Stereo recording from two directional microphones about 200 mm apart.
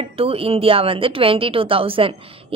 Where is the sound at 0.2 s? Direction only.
30° right (ahead or behind).